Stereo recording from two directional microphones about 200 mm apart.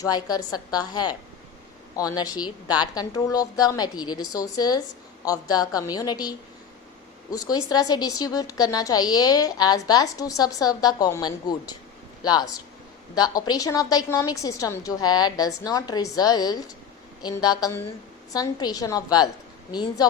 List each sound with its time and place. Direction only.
0.0 s a woman's voice: 20° left (ahead or behind)